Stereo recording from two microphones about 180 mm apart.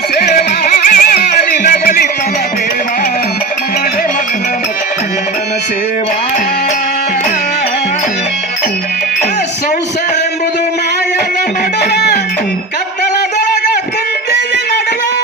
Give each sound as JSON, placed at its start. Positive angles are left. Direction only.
{"t": 0.2, "sound": "music", "side_deg": 60}
{"t": 11.8, "sound": "music", "side_deg": 65}